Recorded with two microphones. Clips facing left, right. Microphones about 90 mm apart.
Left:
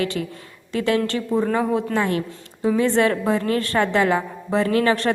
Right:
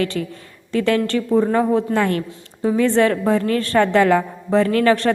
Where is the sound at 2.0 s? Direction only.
50° right (ahead or behind).